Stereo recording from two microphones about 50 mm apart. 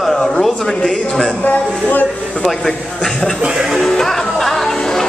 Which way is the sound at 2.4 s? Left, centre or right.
Centre.